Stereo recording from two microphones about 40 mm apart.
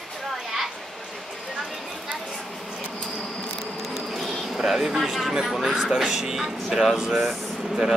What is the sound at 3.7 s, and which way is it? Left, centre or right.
Bee, centre.